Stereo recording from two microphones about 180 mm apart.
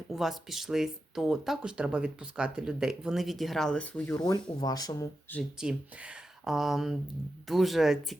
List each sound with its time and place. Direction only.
0.1 s speech: centre (ahead or behind)
4.2 s speech: 25° left (ahead or behind)
5.3 s speech: centre (ahead or behind)